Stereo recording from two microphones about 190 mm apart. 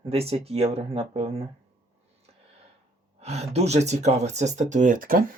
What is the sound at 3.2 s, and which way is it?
Speech, 35° right (ahead or behind).